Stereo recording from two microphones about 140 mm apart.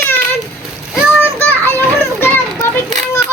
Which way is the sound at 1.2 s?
15° left (ahead or behind).